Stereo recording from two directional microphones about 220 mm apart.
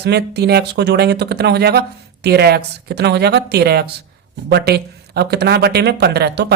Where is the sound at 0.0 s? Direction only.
50° right (ahead or behind).